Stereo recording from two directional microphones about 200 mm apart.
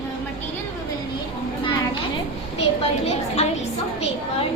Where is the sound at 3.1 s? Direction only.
30° left (ahead or behind).